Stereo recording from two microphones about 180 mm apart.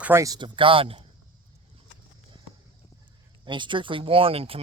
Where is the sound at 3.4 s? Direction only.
25° right (ahead or behind).